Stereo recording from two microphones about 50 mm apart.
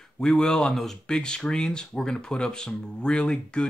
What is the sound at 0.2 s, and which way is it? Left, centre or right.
Speech, centre.